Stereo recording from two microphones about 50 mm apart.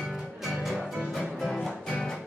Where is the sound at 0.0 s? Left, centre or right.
Centre.